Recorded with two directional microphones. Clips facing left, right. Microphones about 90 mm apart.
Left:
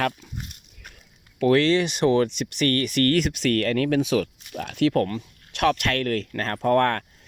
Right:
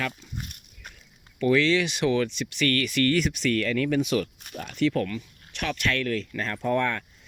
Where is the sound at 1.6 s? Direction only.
40° left (ahead or behind).